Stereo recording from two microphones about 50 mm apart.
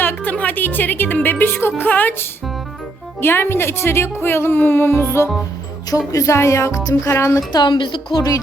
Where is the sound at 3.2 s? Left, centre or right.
Left.